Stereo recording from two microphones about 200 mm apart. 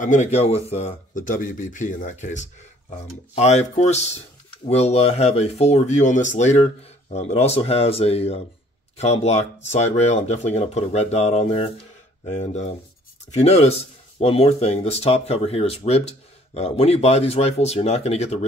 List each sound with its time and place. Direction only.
0.0 s speech: 35° left (ahead or behind)